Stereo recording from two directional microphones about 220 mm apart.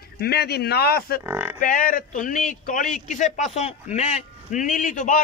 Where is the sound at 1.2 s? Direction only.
10° right (ahead or behind).